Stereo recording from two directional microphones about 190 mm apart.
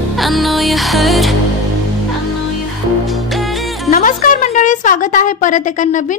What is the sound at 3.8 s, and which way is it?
A woman's voice, 45° left (ahead or behind).